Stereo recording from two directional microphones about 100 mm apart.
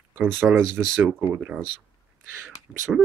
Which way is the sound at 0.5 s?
5° right (ahead or behind).